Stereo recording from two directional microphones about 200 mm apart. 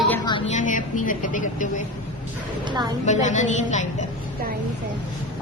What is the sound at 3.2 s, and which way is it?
Speech, 35° left (ahead or behind).